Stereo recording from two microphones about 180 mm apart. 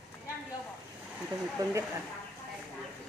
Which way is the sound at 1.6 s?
20° right (ahead or behind).